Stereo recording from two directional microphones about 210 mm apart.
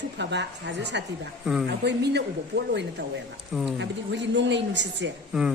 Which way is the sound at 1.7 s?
55° right (ahead or behind).